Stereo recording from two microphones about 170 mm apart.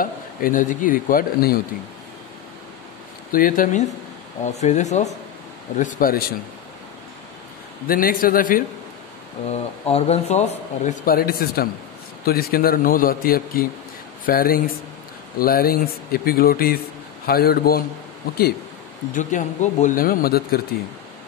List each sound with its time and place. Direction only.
0.0 s speech: 55° left (ahead or behind)
3.3 s speech: 55° left (ahead or behind)
7.8 s speech: 60° left (ahead or behind)
9.5 s speech: 35° left (ahead or behind)
11.1 s speech: 60° left (ahead or behind)
19.1 s speech: 45° left (ahead or behind); by 20.6 s 65° left (ahead or behind)